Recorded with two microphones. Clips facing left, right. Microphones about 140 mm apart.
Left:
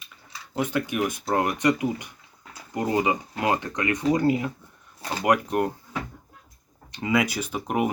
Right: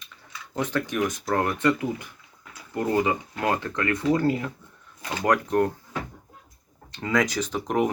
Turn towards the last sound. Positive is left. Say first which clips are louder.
# right 2 dB
turn(degrees=10)  # may be behind; listen again after turning